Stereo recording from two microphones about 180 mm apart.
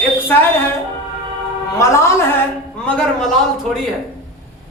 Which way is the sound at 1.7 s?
15° left (ahead or behind).